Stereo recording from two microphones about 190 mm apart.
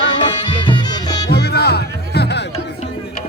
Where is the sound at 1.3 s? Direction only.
60° left (ahead or behind).